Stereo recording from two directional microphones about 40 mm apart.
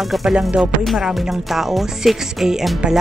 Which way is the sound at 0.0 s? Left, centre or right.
Centre.